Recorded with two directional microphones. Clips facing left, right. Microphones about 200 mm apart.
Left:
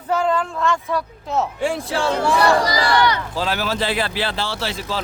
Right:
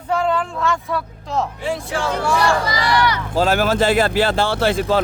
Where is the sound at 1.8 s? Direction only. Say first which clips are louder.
Left 1 dB; 35° left (ahead or behind).